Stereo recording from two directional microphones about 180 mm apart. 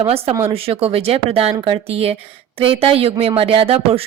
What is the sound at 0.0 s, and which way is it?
Speech, 30° right (ahead or behind).